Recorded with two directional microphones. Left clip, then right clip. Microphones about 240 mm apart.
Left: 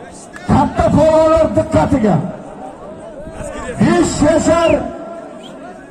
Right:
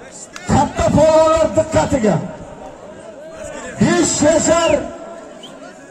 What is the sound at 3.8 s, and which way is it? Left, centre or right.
Speech, right.